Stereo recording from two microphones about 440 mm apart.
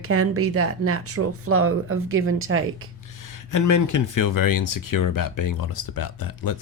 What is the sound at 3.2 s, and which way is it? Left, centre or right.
Speech, left.